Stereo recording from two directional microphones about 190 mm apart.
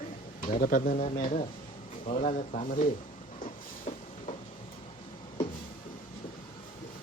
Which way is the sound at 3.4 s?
35° left (ahead or behind).